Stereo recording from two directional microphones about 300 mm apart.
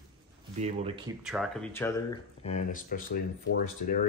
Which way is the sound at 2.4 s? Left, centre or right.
Left.